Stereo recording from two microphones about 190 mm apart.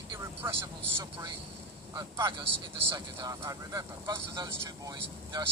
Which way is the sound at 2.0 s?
15° right (ahead or behind).